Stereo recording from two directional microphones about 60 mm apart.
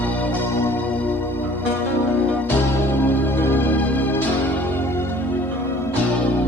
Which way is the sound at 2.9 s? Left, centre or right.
Left.